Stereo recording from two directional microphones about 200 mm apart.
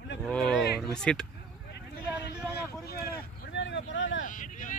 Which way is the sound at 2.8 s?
50° left (ahead or behind).